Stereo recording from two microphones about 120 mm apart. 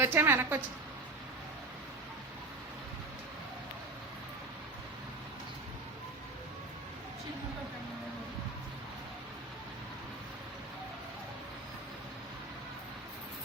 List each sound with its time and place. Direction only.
0.0 s a woman's voice: 20° right (ahead or behind)